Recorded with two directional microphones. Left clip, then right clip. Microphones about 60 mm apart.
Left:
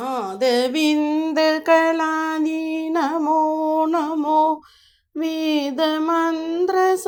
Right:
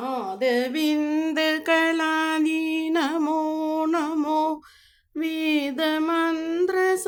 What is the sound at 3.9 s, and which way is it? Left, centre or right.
Mantra, centre.